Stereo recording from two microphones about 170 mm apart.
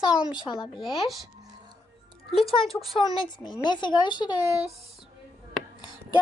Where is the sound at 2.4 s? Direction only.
35° left (ahead or behind).